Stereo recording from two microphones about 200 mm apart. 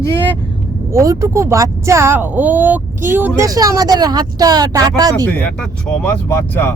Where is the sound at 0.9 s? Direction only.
15° right (ahead or behind).